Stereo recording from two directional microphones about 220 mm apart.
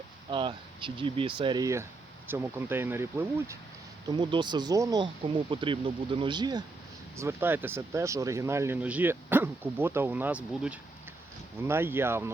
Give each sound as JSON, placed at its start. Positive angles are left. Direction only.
{"t": 0.3, "sound": "speech", "side_deg": -20}